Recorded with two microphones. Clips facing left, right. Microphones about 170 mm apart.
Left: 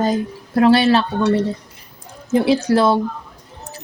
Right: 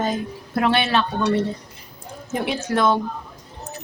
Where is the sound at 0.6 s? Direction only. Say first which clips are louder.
Left 7 dB; 35° left (ahead or behind).